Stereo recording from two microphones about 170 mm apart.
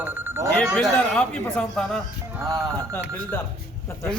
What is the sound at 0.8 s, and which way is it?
Speech, 5° left (ahead or behind).